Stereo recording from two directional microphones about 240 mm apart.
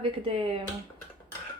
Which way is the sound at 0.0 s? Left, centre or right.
Right.